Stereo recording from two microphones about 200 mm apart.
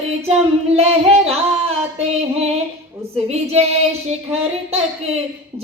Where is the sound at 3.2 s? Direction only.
30° right (ahead or behind).